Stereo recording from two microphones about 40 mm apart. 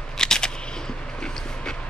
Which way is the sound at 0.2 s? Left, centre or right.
Centre.